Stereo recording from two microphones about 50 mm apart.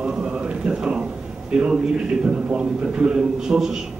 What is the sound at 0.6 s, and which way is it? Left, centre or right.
A man's voice, right.